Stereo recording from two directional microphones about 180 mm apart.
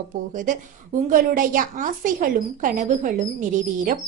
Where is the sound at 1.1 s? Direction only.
50° right (ahead or behind).